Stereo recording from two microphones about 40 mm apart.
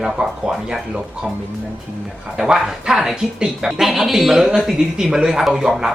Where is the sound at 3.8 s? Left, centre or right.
Centre.